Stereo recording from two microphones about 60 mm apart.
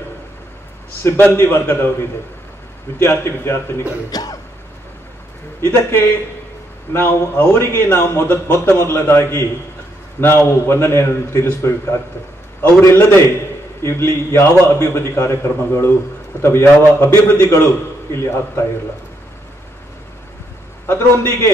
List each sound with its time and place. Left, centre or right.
1.2 s a man's voice: left
4.1 s cough: left
5.6 s a man's voice: left
20.8 s a man's voice: left